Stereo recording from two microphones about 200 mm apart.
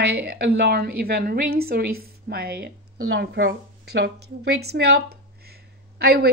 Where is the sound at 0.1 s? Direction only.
50° right (ahead or behind).